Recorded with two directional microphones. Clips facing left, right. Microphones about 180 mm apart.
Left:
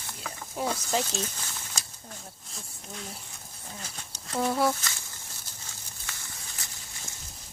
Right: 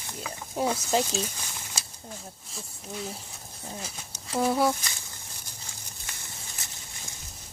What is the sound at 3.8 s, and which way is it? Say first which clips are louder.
Speech: right 2 dB; 10° right (ahead or behind).